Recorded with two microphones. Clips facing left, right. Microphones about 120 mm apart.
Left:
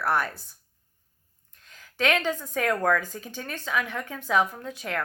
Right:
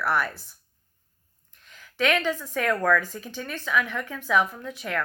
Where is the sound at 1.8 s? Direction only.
45° left (ahead or behind).